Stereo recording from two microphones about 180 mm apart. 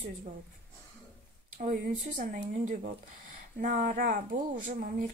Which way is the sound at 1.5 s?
45° right (ahead or behind).